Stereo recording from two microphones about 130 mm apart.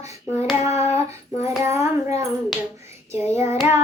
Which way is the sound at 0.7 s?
55° left (ahead or behind).